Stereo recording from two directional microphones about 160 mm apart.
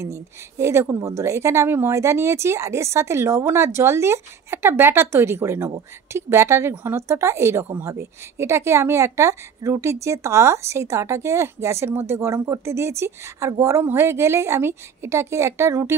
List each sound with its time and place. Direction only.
0.0 s a woman's voice: 20° right (ahead or behind)